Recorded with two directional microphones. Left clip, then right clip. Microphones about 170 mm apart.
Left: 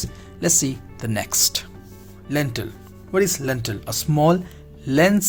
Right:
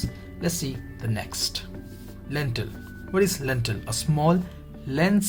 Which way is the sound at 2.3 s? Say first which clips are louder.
Left 6 dB; 40° left (ahead or behind).